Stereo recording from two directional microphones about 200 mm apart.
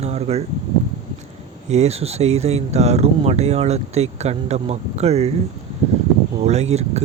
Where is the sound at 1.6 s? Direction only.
35° right (ahead or behind).